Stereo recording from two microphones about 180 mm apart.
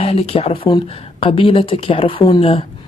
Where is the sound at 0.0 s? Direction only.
35° left (ahead or behind).